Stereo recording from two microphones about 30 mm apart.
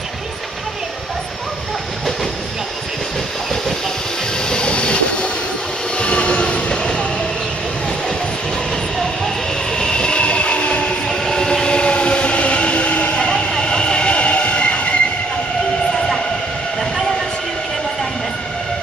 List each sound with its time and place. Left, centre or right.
4.5 s train: left
8.9 s vehicle: centre
9.7 s train: left
11.2 s train: left